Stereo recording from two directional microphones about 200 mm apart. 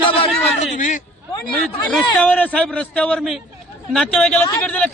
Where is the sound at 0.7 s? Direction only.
40° left (ahead or behind).